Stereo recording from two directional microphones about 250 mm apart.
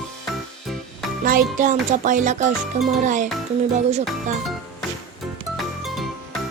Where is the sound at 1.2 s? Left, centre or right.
Right.